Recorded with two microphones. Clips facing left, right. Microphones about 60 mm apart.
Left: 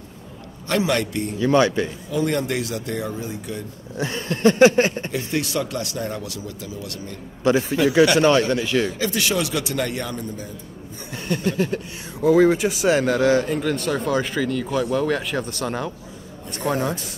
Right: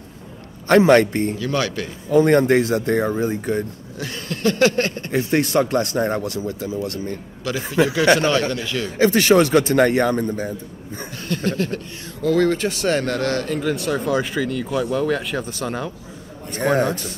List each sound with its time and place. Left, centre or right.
0.7 s speech: right
1.4 s a sound: left
2.0 s speech: right
4.0 s a sound: left
5.1 s speech: right
7.5 s a sound: left
8.9 s a man's voice: right
11.1 s speech: centre
13.6 s speech: centre